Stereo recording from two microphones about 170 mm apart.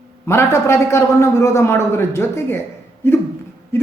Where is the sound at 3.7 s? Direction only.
15° left (ahead or behind).